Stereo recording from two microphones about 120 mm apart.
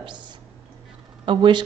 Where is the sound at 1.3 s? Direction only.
40° right (ahead or behind).